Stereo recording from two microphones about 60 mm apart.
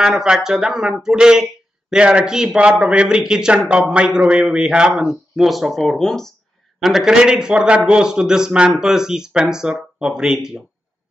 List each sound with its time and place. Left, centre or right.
0.0 s a man's voice: centre
4.9 s speech: centre
6.8 s a man's voice: centre